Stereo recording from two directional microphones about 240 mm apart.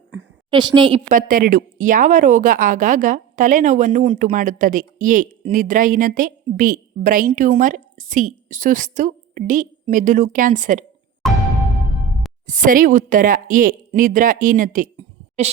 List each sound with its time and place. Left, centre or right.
0.5 s a woman's voice: centre
1.1 s a woman's voice: right
11.2 s music: centre
12.5 s a woman's voice: right